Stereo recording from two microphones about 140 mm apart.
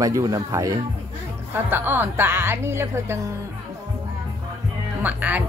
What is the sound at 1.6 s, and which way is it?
Speech, 15° right (ahead or behind).